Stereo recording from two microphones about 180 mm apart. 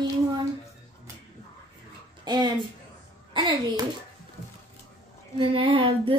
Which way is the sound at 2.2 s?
25° right (ahead or behind).